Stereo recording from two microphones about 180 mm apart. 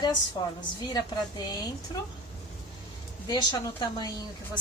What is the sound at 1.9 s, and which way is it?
Speech, 25° left (ahead or behind).